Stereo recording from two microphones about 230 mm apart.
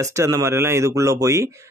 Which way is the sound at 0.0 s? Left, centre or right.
Centre.